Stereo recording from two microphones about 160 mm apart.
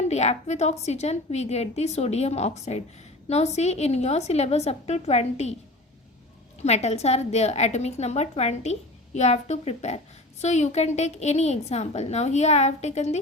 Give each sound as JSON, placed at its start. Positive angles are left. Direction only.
{"t": 0.0, "sound": "a woman's voice", "side_deg": 45}
{"t": 6.6, "sound": "a woman's voice", "side_deg": 45}